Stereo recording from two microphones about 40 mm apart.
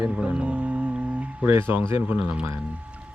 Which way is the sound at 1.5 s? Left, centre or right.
Right.